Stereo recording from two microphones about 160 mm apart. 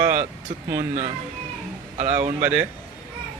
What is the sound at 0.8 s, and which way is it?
Speech, 50° right (ahead or behind).